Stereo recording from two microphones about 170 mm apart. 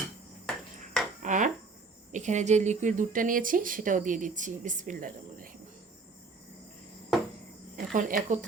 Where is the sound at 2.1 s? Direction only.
45° right (ahead or behind).